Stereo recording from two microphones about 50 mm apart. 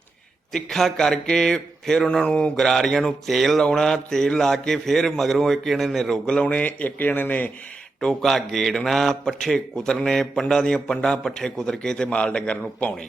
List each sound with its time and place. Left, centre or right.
0.5 s a man's voice: centre
2.2 s mantra: centre
2.6 s a man's voice: centre
3.2 s mantra: centre
3.7 s a man's voice: centre
6.2 s a man's voice: centre
6.5 s speech: left
8.2 s a man's voice: centre; by 12.9 s left